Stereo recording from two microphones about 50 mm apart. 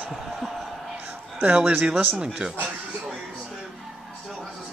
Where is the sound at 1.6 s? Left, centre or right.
Right.